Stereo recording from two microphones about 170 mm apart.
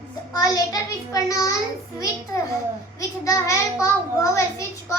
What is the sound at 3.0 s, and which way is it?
A child's voice, 20° left (ahead or behind).